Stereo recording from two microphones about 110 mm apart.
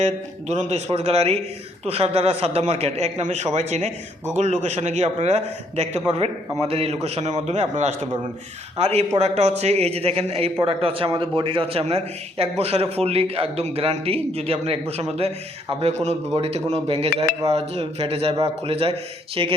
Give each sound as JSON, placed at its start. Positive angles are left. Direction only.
{"t": 0.0, "sound": "a man's voice", "side_deg": -90}
{"t": 8.8, "sound": "a man's voice", "side_deg": -75}
{"t": 15.8, "sound": "a man's voice", "side_deg": -85}